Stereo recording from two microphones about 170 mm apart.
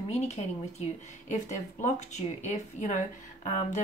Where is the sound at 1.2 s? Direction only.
45° left (ahead or behind).